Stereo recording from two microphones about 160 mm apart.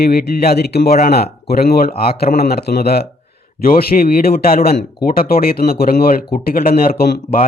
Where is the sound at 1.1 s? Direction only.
75° left (ahead or behind).